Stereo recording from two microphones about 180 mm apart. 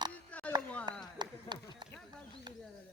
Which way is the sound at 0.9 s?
25° right (ahead or behind).